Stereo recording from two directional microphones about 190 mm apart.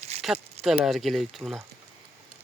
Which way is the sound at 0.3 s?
5° right (ahead or behind).